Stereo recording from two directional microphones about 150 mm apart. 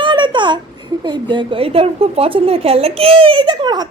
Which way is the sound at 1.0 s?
30° right (ahead or behind).